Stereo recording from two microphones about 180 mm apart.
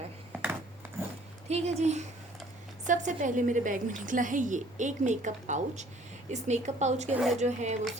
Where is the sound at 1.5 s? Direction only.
40° right (ahead or behind).